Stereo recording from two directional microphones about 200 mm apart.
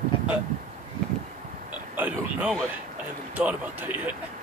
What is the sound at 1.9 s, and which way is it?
A man's voice, 5° right (ahead or behind).